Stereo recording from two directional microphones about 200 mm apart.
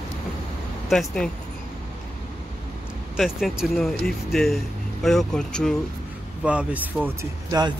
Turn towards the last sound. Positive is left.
turn(degrees=-20)  # may be behind; listen again after turning